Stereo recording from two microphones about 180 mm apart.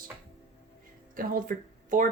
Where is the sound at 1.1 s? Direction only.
50° right (ahead or behind).